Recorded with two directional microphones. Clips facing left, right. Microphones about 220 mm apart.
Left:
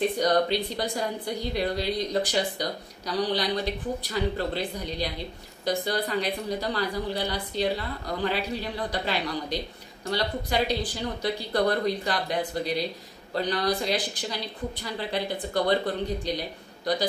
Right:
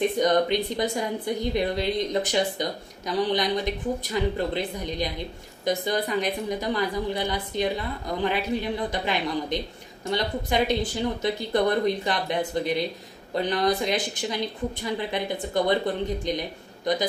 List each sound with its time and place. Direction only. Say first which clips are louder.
0.2 s a woman's voice: right 2 dB; 20° right (ahead or behind)